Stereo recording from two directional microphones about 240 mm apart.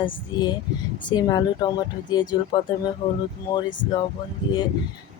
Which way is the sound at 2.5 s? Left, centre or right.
Left.